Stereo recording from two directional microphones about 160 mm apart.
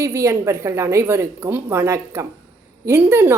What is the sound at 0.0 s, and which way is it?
A woman's voice, 20° right (ahead or behind).